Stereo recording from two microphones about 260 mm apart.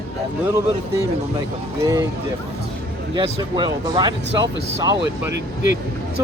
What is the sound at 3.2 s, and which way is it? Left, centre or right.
Speech, centre.